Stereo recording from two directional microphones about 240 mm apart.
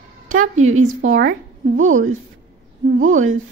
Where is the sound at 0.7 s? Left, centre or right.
Right.